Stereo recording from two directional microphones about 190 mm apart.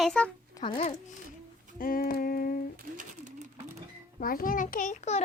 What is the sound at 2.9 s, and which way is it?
Sewing machine, 40° right (ahead or behind).